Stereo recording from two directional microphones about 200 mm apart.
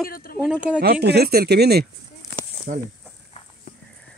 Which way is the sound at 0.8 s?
50° right (ahead or behind).